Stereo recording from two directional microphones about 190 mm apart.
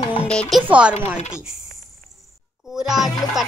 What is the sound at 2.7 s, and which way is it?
Music, centre (ahead or behind).